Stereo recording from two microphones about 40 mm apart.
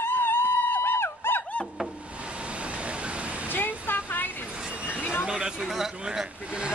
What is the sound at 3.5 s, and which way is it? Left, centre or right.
Waterfall, left.